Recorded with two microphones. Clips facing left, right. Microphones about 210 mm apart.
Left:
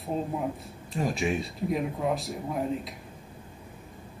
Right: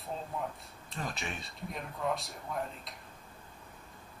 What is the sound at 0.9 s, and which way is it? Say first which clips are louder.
Speech: left 12 dB; centre (ahead or behind).